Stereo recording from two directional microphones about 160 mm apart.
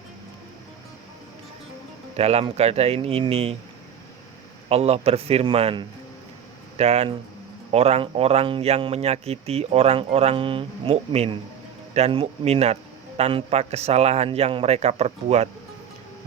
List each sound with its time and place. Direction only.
2.1 s speech: 40° right (ahead or behind)
4.7 s speech: 40° right (ahead or behind)